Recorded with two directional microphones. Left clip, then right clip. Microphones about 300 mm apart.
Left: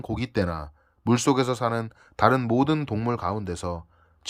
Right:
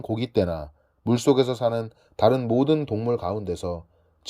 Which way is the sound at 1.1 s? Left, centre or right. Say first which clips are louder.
Right 2 dB; centre.